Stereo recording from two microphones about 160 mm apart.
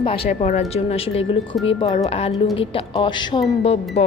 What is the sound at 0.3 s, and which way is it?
A woman's voice, 50° left (ahead or behind).